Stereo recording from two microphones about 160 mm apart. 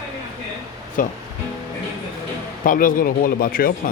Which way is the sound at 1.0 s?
60° left (ahead or behind).